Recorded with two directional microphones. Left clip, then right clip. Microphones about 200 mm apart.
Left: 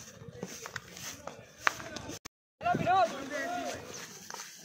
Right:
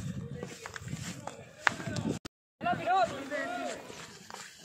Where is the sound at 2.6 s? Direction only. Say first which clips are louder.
Left 1 dB; 55° left (ahead or behind).